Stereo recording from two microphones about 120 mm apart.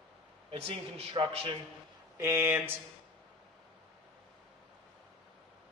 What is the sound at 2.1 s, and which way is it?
Speech, 20° right (ahead or behind).